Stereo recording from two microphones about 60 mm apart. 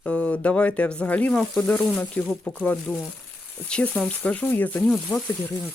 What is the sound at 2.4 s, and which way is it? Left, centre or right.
Speech, left.